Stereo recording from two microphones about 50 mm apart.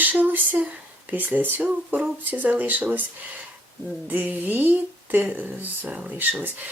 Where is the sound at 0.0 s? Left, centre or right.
Right.